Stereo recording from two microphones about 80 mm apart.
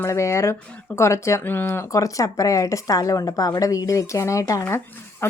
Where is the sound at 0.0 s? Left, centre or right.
Left.